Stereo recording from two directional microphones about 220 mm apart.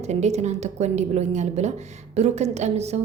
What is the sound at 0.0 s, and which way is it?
A woman's voice, 30° right (ahead or behind).